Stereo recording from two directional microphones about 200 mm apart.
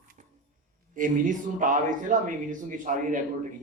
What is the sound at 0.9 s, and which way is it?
Speech, 40° right (ahead or behind).